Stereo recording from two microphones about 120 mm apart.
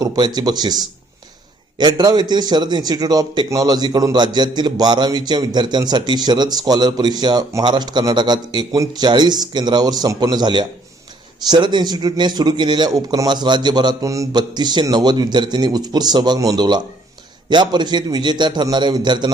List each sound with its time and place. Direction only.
0.0 s a man's voice: 35° right (ahead or behind)